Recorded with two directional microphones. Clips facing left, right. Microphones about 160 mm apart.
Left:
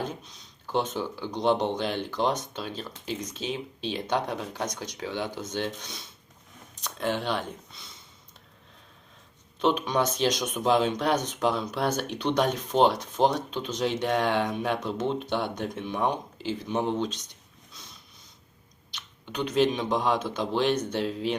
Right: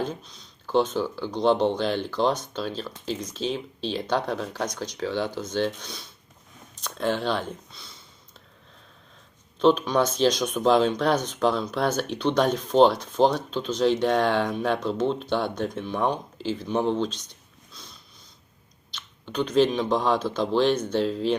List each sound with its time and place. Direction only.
0.7 s speech: 15° left (ahead or behind)
9.7 s speech: 15° left (ahead or behind)
19.9 s speech: 15° left (ahead or behind)